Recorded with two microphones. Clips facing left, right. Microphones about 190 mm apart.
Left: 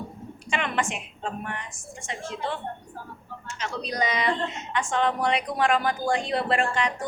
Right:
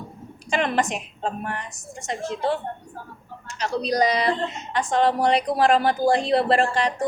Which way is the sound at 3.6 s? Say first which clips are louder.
Right 7 dB; 35° right (ahead or behind).